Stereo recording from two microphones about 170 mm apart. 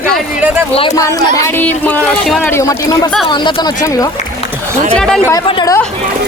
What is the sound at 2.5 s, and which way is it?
A woman's voice, 15° left (ahead or behind).